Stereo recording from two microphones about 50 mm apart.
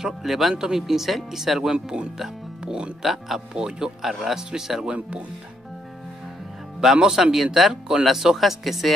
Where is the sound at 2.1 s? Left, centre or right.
Centre.